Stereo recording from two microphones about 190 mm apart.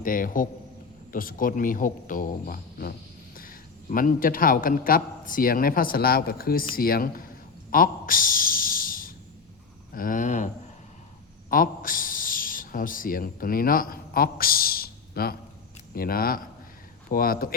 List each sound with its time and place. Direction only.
0.0 s a man's voice: 45° left (ahead or behind)
7.7 s a sound: 45° left (ahead or behind)
9.9 s speech: 45° left (ahead or behind)
11.5 s a man's voice: 45° left (ahead or behind)